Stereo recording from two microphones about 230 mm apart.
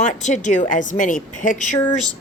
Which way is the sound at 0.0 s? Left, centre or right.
Left.